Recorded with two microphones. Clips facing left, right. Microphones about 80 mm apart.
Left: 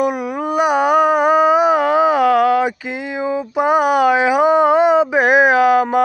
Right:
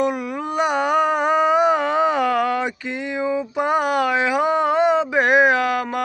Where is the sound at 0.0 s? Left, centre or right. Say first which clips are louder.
Left 3 dB; centre.